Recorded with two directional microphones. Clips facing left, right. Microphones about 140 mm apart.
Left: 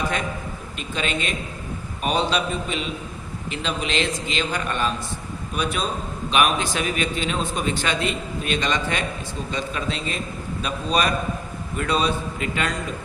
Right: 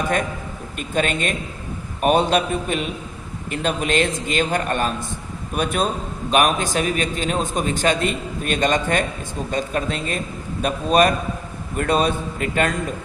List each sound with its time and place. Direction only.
0.8 s a man's voice: 50° right (ahead or behind)